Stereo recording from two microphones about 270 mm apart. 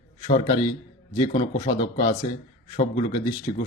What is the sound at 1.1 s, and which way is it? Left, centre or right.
Speech, centre.